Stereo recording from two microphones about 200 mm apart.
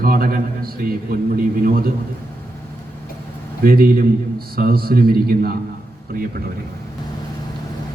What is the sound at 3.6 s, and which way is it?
A man's voice, 50° right (ahead or behind).